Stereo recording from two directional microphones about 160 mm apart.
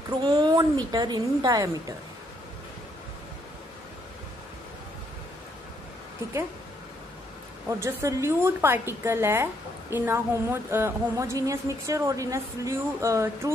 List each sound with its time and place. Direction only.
0.2 s a woman's voice: 25° right (ahead or behind)
7.6 s a woman's voice: 15° right (ahead or behind)